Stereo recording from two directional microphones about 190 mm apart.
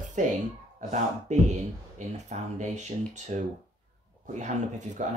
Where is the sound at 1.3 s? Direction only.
40° right (ahead or behind).